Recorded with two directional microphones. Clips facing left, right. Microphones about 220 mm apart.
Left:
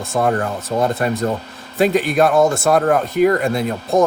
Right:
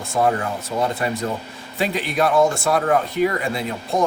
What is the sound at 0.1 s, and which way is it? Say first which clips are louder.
Speech: left 2 dB; 45° left (ahead or behind).